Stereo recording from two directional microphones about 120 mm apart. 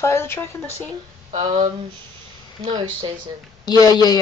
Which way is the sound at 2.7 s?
40° right (ahead or behind).